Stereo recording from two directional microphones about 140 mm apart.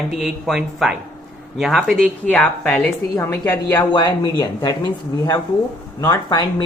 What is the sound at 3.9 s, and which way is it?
Speech, 35° left (ahead or behind).